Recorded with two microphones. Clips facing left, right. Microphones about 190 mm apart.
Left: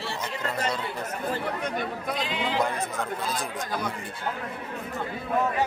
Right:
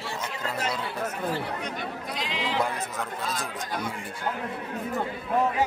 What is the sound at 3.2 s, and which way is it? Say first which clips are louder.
Speech: left 1 dB; centre (ahead or behind).